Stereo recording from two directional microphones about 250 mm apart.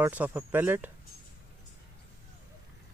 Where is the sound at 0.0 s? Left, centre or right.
Centre.